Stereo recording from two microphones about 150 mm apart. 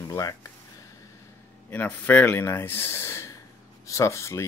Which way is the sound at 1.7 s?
10° left (ahead or behind).